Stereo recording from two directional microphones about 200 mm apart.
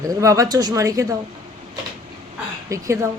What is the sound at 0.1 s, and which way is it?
Speech, 15° right (ahead or behind).